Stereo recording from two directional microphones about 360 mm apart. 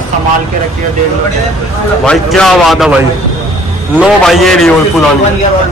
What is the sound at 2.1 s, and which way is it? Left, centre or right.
Speech, centre.